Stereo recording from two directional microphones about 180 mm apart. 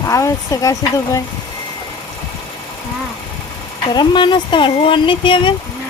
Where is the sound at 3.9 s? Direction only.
25° left (ahead or behind).